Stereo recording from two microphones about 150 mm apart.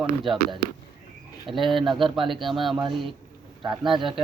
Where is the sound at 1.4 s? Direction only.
Centre (ahead or behind).